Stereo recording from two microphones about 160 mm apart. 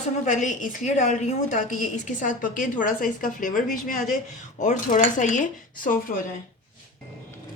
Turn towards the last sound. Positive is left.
turn(degrees=55)  # may be behind; listen again after turning